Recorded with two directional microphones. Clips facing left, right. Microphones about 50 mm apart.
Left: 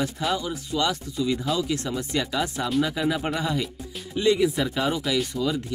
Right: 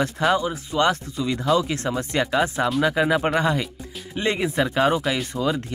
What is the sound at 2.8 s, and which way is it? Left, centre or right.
Speech, right.